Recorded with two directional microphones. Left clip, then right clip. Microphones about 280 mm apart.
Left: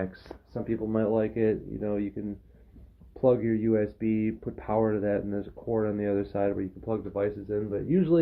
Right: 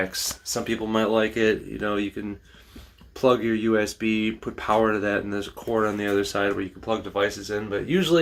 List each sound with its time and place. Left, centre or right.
0.0 s speech: centre
3.2 s speech: centre